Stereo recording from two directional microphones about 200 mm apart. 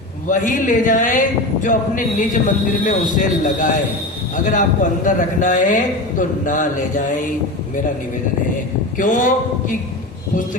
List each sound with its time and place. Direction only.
0.3 s a man's voice: 40° left (ahead or behind)
9.0 s a man's voice: 40° left (ahead or behind)